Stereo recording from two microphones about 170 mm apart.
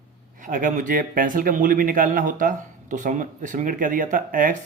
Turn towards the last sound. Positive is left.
turn(degrees=-50)  # may be behind; listen again after turning